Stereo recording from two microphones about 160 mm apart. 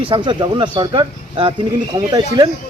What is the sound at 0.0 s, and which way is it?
Speech, 30° right (ahead or behind).